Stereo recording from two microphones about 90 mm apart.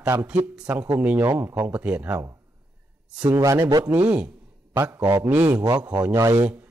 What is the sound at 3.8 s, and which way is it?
Speech, 20° right (ahead or behind).